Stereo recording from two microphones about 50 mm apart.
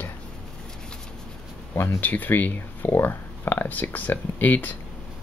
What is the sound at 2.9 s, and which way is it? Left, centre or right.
Speech, left.